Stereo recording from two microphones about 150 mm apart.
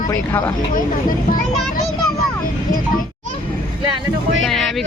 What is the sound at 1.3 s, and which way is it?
Speech, 60° left (ahead or behind).